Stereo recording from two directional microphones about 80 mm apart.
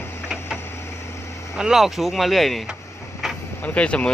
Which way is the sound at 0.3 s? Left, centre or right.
Centre.